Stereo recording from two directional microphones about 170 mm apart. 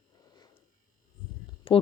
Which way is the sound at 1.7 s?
30° left (ahead or behind).